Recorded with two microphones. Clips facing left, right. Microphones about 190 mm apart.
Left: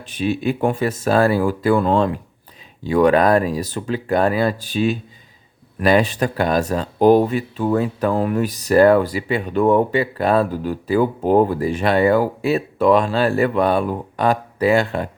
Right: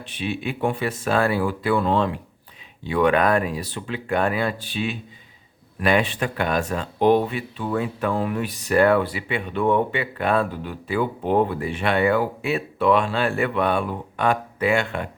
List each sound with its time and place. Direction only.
0.0 s speech: 45° left (ahead or behind)